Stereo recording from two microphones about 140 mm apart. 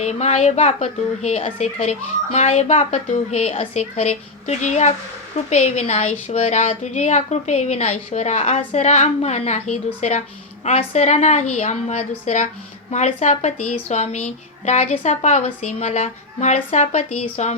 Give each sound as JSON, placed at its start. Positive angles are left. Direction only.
{"t": 0.0, "sound": "speech", "side_deg": 55}